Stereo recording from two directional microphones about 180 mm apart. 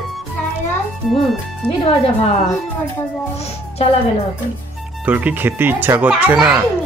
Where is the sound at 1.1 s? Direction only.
Centre (ahead or behind).